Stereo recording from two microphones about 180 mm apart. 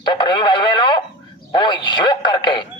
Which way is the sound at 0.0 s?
25° left (ahead or behind).